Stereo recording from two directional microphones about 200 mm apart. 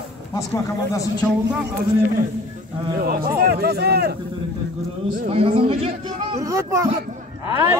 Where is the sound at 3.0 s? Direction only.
45° right (ahead or behind).